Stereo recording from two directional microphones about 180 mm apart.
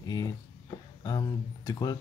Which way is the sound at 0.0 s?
20° left (ahead or behind).